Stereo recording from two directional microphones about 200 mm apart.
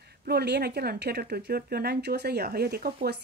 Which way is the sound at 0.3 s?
55° right (ahead or behind).